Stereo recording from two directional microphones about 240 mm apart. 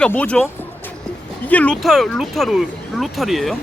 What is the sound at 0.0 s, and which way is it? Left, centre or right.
Speech, centre.